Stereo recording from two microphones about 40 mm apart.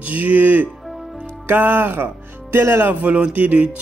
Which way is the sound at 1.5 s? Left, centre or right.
Right.